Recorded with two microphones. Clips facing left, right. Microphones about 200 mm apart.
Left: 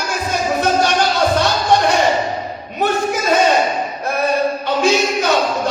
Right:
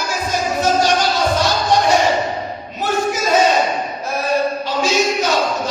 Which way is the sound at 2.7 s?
60° left (ahead or behind).